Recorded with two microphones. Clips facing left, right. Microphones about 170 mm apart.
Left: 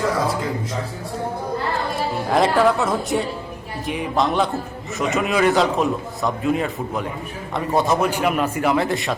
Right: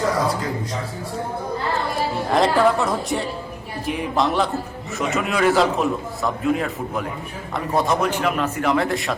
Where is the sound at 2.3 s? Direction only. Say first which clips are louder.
Even; centre (ahead or behind).